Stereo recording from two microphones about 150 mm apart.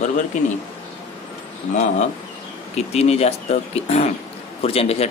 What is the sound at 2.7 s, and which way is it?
Speech, 45° left (ahead or behind).